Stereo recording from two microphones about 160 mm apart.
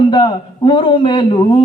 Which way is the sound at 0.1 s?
30° left (ahead or behind).